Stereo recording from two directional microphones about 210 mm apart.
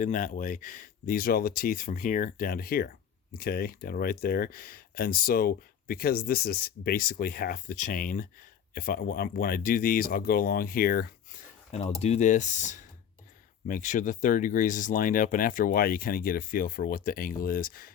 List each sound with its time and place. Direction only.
0.0 s speech: 40° left (ahead or behind)
11.7 s speech: 30° left (ahead or behind)